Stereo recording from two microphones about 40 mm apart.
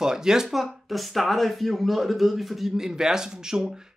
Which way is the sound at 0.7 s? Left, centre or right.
Centre.